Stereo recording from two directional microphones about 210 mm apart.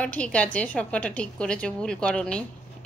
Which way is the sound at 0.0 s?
5° left (ahead or behind).